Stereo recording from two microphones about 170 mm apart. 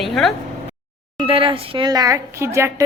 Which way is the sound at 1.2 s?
30° right (ahead or behind).